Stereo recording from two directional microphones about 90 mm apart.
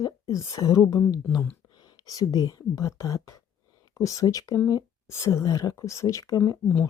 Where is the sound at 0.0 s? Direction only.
40° left (ahead or behind).